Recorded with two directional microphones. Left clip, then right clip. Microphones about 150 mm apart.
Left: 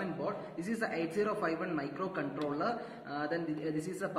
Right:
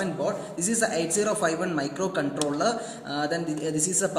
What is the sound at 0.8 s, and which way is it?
A man's voice, 70° right (ahead or behind).